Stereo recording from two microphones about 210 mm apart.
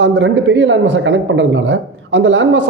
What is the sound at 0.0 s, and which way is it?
Speech, 60° right (ahead or behind).